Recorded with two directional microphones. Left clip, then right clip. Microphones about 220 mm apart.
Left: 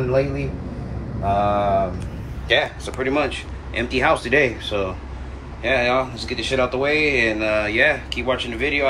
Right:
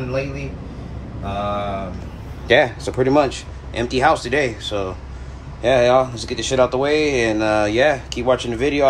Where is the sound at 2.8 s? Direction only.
90° right.